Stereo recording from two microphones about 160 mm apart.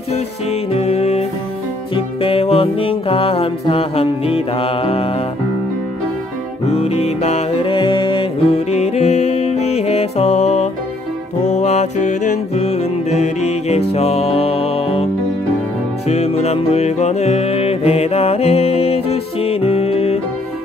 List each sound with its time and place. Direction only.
0.7 s music: 40° left (ahead or behind)
6.7 s music: 40° left (ahead or behind)
7.7 s music: 30° left (ahead or behind)
16.1 s music: 40° left (ahead or behind)